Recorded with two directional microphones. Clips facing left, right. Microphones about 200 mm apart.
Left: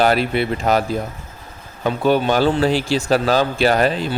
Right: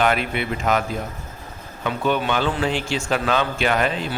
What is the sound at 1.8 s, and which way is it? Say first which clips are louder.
A man's voice: left 5 dB; 35° left (ahead or behind).